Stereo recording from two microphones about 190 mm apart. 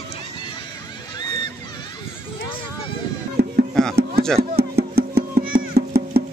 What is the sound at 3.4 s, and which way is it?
Music, 55° right (ahead or behind).